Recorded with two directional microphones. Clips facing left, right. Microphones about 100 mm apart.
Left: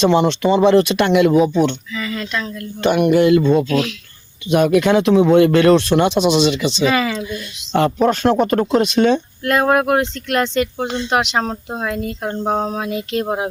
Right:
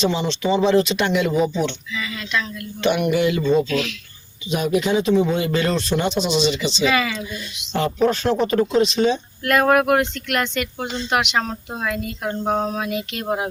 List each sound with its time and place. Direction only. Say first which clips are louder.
0.0 s speech: left 7 dB; 55° left (ahead or behind)
1.5 s speech: left 6 dB; 45° left (ahead or behind)
2.8 s a sound: left 5 dB; 50° left (ahead or behind)
4.4 s speech: left 7 dB; 60° left (ahead or behind)
6.8 s speech: left 3 dB; 35° left (ahead or behind)
8.0 s speech: left 1 dB; 50° left (ahead or behind)
9.4 s speech: right 1 dB; 25° left (ahead or behind)